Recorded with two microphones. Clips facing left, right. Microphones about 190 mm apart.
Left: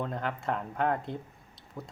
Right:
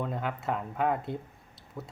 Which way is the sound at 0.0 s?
5° right (ahead or behind).